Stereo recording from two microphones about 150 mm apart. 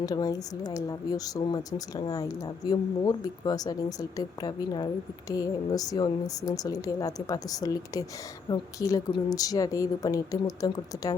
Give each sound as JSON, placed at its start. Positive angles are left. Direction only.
{"t": 0.0, "sound": "speech", "side_deg": 25}